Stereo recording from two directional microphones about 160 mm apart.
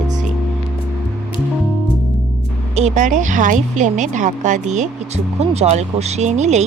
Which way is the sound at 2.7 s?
50° right (ahead or behind).